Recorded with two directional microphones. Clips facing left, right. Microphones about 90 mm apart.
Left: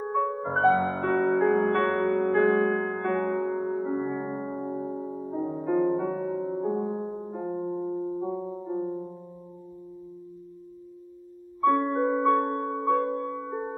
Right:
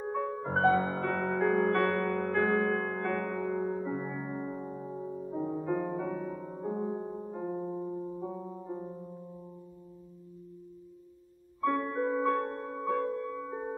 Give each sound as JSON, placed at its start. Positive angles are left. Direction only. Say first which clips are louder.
{"t": 0.3, "sound": "music", "louder": "left 5 dB", "side_deg": 25}
{"t": 0.9, "sound": "music", "louder": "left 7 dB", "side_deg": 35}
{"t": 5.5, "sound": "music", "louder": "left 9 dB", "side_deg": 10}
{"t": 5.9, "sound": "music", "louder": "left 7 dB", "side_deg": 30}
{"t": 11.8, "sound": "music", "louder": "left 6 dB", "side_deg": 25}
{"t": 13.4, "sound": "music", "louder": "left 4 dB", "side_deg": 25}